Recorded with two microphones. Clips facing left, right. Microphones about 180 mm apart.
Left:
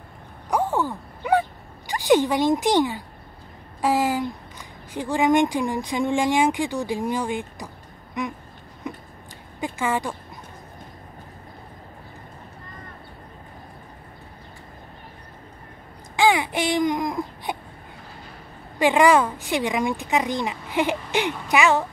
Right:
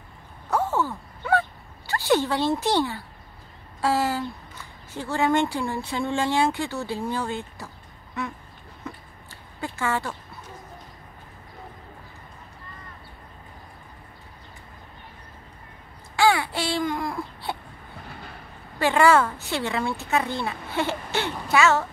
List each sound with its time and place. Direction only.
0.5 s a sound: 15° left (ahead or behind)
1.9 s a woman's voice: 15° left (ahead or behind)
8.8 s a sound: 15° left (ahead or behind)
9.6 s speech: 15° left (ahead or behind)
16.2 s baby cry: 20° left (ahead or behind)
18.8 s speech: 15° left (ahead or behind)